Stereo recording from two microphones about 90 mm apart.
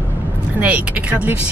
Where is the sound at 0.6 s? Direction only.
15° right (ahead or behind).